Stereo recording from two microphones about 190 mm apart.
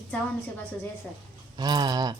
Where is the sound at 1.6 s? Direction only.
20° right (ahead or behind).